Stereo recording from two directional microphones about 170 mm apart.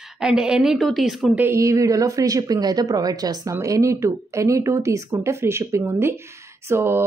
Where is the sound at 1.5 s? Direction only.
20° right (ahead or behind).